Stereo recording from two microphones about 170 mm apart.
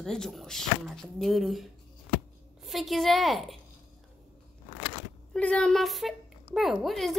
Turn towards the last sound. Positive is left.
turn(degrees=0)  # may be behind; listen again after turning